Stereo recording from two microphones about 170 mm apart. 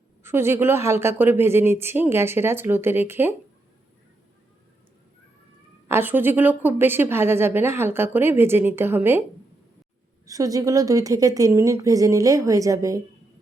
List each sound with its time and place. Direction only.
0.2 s a woman's voice: 15° right (ahead or behind)
5.9 s a woman's voice: 10° right (ahead or behind)
10.2 s a woman's voice: 20° right (ahead or behind)